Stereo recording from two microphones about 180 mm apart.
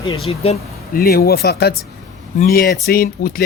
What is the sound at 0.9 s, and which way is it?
Speech, 55° left (ahead or behind).